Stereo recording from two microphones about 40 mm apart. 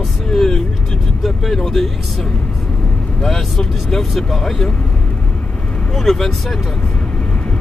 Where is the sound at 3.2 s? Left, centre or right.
Centre.